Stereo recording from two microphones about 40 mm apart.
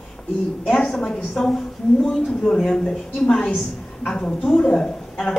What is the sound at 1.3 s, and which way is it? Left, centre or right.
Speech, centre.